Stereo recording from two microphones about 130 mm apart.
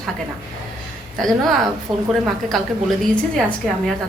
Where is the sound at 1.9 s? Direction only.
30° right (ahead or behind).